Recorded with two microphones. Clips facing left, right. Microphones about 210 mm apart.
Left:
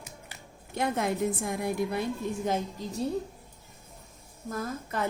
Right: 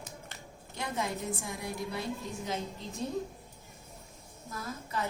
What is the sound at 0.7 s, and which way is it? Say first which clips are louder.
A woman's voice: left 7 dB; 55° left (ahead or behind).